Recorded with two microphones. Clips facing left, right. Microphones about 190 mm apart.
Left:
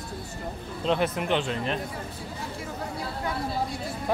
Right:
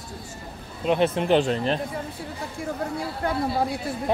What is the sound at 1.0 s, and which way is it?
Speech, 25° right (ahead or behind).